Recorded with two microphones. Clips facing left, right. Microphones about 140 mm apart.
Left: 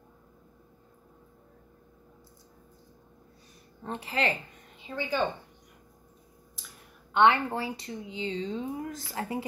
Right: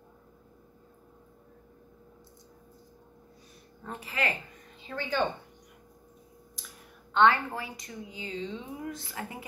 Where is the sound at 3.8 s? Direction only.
30° left (ahead or behind).